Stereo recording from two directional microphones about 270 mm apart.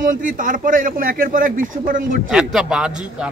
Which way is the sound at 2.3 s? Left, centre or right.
Centre.